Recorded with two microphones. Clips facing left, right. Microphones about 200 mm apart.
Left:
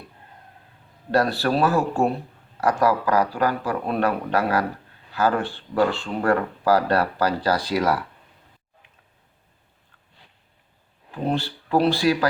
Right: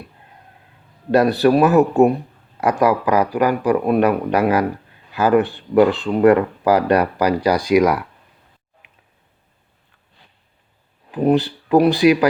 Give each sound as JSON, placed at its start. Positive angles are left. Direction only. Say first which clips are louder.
{"t": 1.1, "sound": "speech", "louder": "right 7 dB", "side_deg": -20}
{"t": 11.1, "sound": "speech", "louder": "right 9 dB", "side_deg": -15}